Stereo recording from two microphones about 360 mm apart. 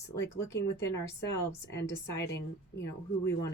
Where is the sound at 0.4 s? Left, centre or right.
Centre.